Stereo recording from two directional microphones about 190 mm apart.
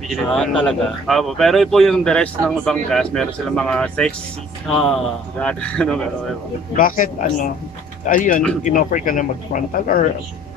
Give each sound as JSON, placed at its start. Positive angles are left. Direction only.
{"t": 0.1, "sound": "speech", "side_deg": 5}
{"t": 6.8, "sound": "speech", "side_deg": 45}